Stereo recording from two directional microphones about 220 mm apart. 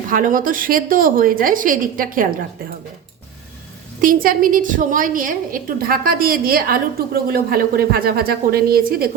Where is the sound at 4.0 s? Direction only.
40° right (ahead or behind).